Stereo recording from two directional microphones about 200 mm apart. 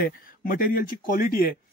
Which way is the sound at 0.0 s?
45° left (ahead or behind).